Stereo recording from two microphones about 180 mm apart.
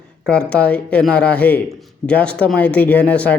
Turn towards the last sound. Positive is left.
turn(degrees=5)  # may be behind; listen again after turning